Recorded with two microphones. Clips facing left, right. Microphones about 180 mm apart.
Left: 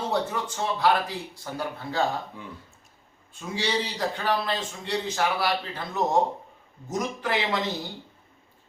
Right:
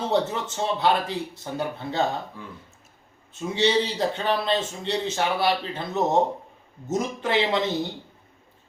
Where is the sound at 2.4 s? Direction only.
20° left (ahead or behind).